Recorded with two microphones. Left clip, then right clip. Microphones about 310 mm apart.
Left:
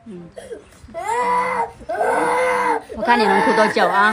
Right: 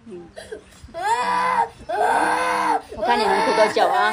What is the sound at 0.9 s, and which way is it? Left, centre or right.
Groan, centre.